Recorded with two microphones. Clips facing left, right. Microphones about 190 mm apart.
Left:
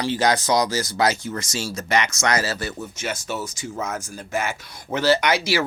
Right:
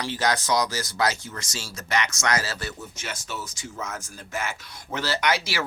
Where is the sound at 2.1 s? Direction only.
35° left (ahead or behind).